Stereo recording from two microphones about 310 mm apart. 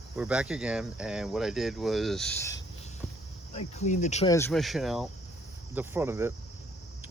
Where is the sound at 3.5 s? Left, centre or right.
Left.